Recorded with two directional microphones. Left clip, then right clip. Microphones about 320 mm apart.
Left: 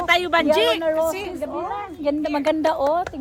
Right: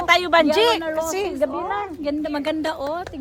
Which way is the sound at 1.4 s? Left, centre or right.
Right.